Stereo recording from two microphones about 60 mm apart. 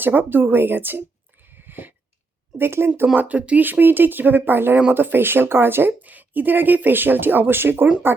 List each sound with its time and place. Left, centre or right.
0.0 s speech: right
1.5 s a sound: right
2.6 s speech: right
3.2 s speech: right
3.6 s speech: right